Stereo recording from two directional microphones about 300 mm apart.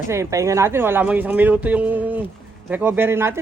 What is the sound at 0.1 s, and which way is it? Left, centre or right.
Speech, centre.